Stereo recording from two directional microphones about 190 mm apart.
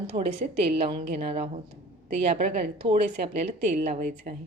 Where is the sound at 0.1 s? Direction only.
40° right (ahead or behind).